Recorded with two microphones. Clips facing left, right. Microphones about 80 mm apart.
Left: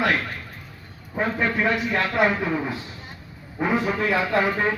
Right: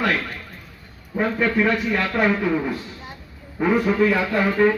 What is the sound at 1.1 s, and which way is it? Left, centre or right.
A man's voice, centre.